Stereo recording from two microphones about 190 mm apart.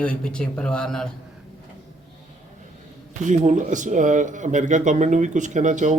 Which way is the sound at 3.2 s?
40° right (ahead or behind).